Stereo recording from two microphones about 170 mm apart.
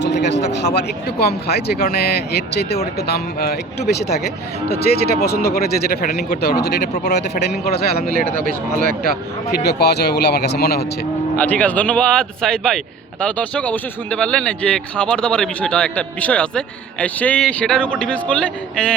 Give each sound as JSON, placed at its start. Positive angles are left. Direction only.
{"t": 0.0, "sound": "a man's voice", "side_deg": 90}
{"t": 7.6, "sound": "speech", "side_deg": 65}
{"t": 8.1, "sound": "speech", "side_deg": -50}
{"t": 9.5, "sound": "a man's voice", "side_deg": 75}
{"t": 11.3, "sound": "a man's voice", "side_deg": 10}